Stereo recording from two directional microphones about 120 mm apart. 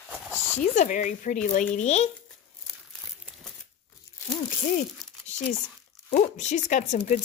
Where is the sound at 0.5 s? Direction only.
80° left.